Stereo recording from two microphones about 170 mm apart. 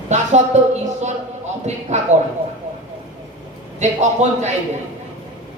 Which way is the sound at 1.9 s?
40° right (ahead or behind).